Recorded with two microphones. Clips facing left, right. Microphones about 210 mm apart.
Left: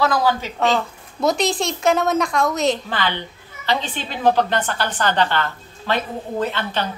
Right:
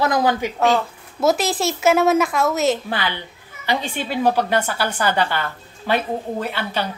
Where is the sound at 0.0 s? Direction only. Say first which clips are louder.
Right 1 dB; 20° right (ahead or behind).